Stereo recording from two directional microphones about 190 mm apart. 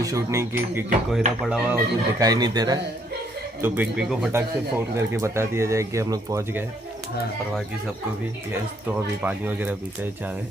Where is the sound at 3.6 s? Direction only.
10° right (ahead or behind).